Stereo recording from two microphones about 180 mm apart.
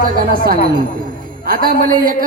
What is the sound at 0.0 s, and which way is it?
Speech, 50° right (ahead or behind).